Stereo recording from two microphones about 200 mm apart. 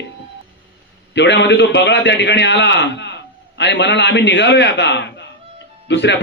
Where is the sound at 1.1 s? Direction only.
60° left (ahead or behind).